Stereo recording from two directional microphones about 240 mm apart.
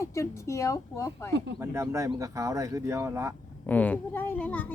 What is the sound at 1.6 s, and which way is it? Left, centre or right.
Speech, centre.